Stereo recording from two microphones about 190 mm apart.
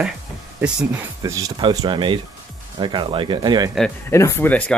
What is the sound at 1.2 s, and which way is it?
Speech, 15° right (ahead or behind).